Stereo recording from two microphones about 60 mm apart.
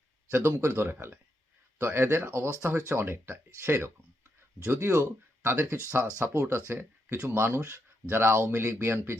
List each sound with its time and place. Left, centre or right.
0.3 s speech: right